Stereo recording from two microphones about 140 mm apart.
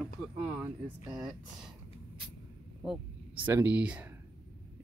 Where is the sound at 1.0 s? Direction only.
5° right (ahead or behind).